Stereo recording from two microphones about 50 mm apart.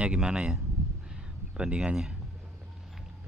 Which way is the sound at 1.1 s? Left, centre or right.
Centre.